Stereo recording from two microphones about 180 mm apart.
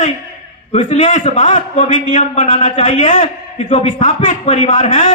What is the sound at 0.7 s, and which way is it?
A man's voice, 40° left (ahead or behind).